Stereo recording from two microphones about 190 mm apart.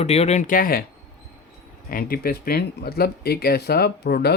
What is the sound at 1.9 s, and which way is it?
Speech, 50° left (ahead or behind).